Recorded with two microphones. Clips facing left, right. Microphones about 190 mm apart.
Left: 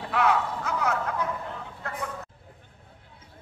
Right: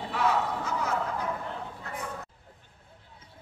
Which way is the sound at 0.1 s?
65° left (ahead or behind).